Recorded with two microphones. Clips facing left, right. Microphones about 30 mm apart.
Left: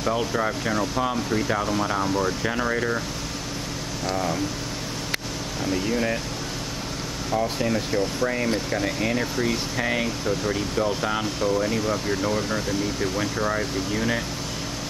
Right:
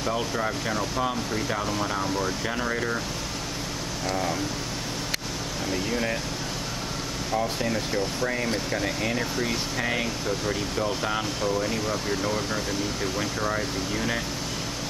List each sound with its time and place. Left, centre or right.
0.0 s speech: centre
4.1 s speech: centre
5.7 s speech: centre
7.2 s speech: centre